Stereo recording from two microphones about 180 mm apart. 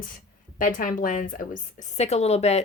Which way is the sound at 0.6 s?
50° left (ahead or behind).